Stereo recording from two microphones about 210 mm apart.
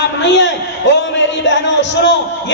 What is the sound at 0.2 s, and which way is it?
A man's voice, 60° left (ahead or behind).